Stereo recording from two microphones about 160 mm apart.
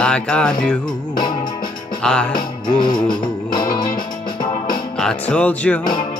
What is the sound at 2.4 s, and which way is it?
Music, 30° left (ahead or behind).